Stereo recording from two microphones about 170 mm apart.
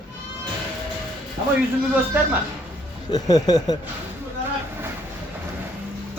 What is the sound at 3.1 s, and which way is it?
Speech, 25° left (ahead or behind).